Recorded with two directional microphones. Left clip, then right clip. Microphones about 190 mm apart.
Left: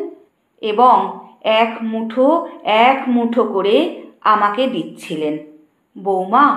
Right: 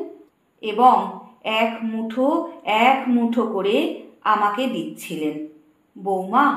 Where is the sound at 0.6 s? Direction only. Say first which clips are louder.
Left 4 dB; 35° left (ahead or behind).